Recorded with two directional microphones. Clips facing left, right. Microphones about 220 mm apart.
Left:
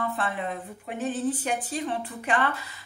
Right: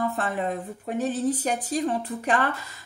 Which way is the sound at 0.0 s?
40° right (ahead or behind).